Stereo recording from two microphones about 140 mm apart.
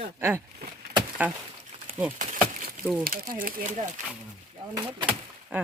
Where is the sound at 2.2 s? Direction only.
70° right (ahead or behind).